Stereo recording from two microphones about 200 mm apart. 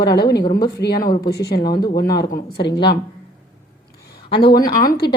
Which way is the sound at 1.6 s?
20° left (ahead or behind).